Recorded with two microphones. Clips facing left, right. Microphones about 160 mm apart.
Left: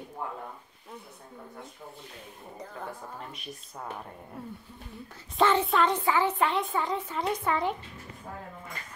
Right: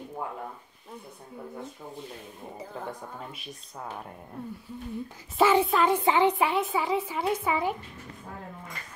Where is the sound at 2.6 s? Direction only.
10° right (ahead or behind).